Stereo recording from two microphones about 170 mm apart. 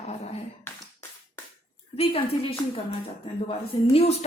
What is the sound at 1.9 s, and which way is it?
Speech, 35° left (ahead or behind).